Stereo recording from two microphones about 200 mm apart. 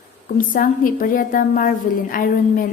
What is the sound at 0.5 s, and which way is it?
A woman's voice, 45° left (ahead or behind).